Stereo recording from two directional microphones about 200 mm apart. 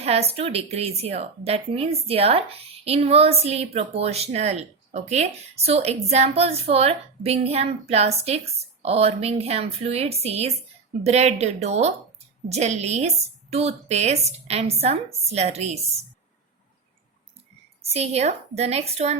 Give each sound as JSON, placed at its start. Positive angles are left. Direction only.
{"t": 0.0, "sound": "speech", "side_deg": -30}
{"t": 17.8, "sound": "speech", "side_deg": -30}